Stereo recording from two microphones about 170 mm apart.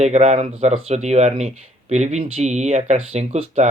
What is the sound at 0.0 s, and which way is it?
Speech, 40° right (ahead or behind).